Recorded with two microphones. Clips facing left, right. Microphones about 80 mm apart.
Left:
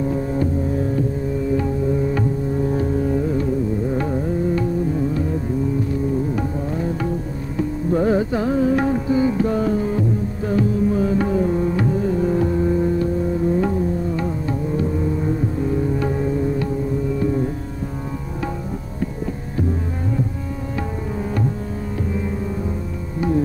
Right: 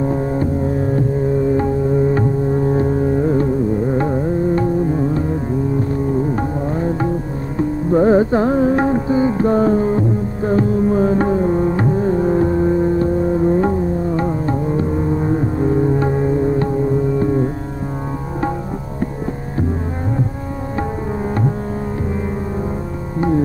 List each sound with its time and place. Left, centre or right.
0.0 s music: right
1.6 s music: right
6.3 s music: right